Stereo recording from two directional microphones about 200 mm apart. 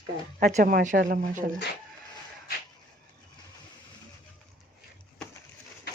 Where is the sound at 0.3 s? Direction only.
40° right (ahead or behind).